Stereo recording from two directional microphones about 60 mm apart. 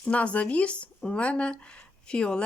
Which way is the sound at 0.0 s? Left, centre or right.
Left.